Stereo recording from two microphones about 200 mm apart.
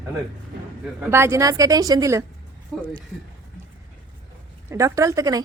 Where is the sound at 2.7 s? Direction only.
5° left (ahead or behind).